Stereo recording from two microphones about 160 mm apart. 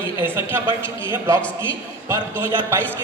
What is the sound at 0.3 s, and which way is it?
Speech, 15° right (ahead or behind).